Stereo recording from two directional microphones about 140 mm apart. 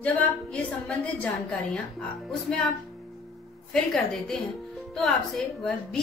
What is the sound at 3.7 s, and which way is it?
A woman's voice, 5° left (ahead or behind).